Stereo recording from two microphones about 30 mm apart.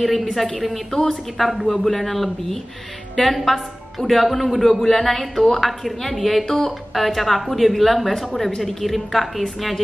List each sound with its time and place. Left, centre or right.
0.0 s a woman's voice: centre
5.3 s a woman's voice: left
5.6 s a woman's voice: centre
6.4 s speech: centre
6.9 s a woman's voice: centre